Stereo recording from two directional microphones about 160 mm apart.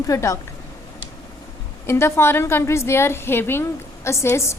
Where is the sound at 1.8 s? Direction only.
15° left (ahead or behind).